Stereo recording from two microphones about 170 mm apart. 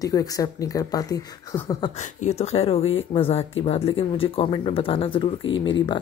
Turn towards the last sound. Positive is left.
turn(degrees=30)  # may be behind; listen again after turning